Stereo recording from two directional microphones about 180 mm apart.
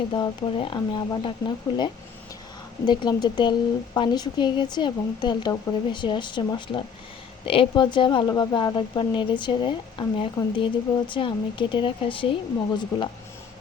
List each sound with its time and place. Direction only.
0.1 s a woman's voice: 30° left (ahead or behind)